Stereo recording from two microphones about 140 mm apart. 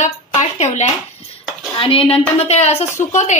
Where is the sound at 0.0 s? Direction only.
55° left (ahead or behind).